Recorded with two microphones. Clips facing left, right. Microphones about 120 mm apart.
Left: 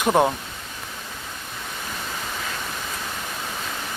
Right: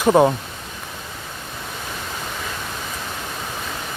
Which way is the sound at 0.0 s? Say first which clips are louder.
Right 4 dB; 5° right (ahead or behind).